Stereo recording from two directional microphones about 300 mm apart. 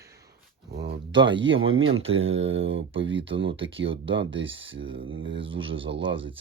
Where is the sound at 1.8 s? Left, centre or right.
Right.